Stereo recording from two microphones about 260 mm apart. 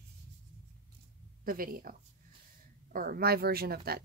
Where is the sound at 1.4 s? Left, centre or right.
Right.